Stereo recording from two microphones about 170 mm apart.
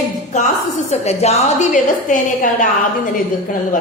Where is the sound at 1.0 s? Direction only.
40° left (ahead or behind).